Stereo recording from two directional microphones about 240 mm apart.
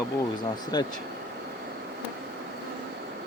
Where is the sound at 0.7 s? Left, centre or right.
Centre.